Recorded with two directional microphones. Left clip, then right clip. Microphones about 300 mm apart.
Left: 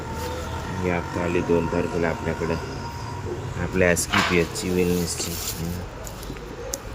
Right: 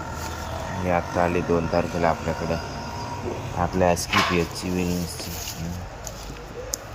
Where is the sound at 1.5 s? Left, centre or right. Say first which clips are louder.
Left 1 dB; centre.